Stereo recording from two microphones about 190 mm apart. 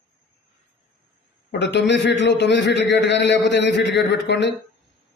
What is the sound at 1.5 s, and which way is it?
A man's voice, 65° left (ahead or behind).